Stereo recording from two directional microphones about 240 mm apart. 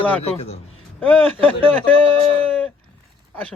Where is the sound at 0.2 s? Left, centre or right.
Left.